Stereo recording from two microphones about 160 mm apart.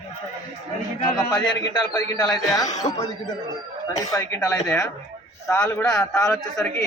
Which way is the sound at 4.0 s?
20° left (ahead or behind).